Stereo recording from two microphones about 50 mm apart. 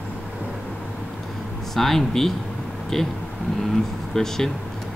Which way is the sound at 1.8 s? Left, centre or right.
Centre.